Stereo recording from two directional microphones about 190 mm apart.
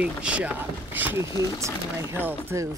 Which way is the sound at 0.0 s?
5° right (ahead or behind).